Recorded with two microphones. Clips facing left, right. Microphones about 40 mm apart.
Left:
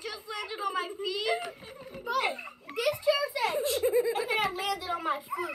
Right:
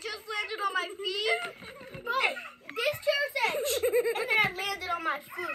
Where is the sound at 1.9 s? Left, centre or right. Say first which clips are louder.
Right 1 dB; right.